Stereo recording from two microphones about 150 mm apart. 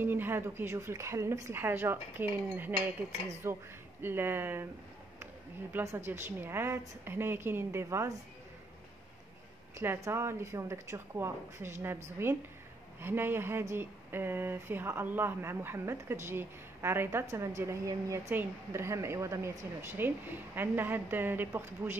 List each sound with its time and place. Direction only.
0.0 s a woman's voice: 15° right (ahead or behind)
9.8 s a woman's voice: 20° right (ahead or behind)